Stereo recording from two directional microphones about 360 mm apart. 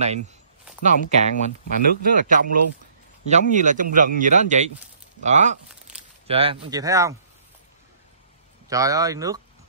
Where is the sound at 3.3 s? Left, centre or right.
Centre.